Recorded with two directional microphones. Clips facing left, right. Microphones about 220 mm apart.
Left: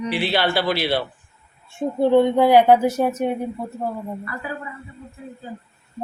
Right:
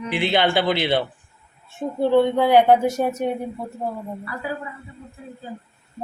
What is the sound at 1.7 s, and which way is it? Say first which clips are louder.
Speech: left 2 dB; 10° left (ahead or behind).